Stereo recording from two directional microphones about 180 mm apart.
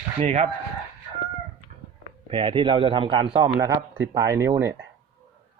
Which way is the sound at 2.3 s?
25° right (ahead or behind).